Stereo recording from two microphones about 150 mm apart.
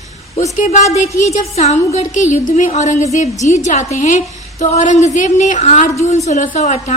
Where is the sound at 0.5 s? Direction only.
50° left (ahead or behind).